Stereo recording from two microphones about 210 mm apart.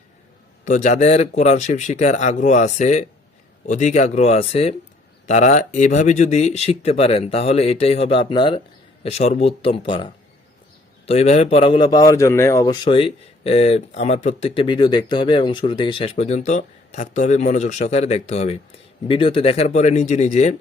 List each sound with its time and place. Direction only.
0.6 s a man's voice: 35° left (ahead or behind)